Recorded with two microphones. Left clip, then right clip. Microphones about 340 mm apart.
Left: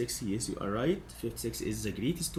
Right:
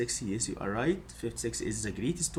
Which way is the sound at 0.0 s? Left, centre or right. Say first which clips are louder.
Right 1 dB; centre.